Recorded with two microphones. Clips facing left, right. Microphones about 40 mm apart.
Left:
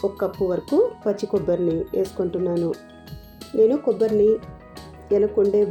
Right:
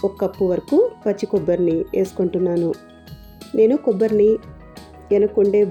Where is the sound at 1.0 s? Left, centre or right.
Right.